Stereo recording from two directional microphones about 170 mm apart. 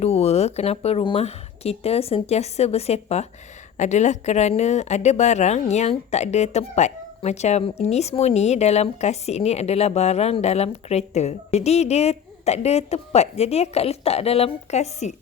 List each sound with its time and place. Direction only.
0.0 s a woman's voice: 35° left (ahead or behind)